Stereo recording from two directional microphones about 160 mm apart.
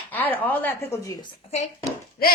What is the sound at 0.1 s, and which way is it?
Speech, 10° left (ahead or behind).